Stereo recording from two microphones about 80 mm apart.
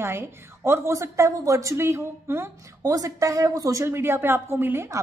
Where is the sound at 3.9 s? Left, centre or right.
Right.